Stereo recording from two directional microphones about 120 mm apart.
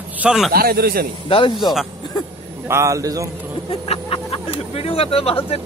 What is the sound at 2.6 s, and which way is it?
Speech, 25° right (ahead or behind).